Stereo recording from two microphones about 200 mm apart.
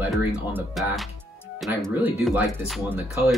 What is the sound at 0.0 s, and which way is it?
Speech, 10° right (ahead or behind).